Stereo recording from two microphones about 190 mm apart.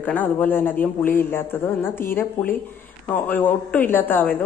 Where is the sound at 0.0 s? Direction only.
10° left (ahead or behind).